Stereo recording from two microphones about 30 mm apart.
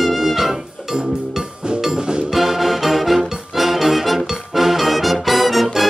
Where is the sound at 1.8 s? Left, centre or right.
Right.